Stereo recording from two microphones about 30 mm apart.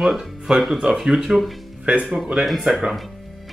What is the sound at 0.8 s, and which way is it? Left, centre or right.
Speech, right.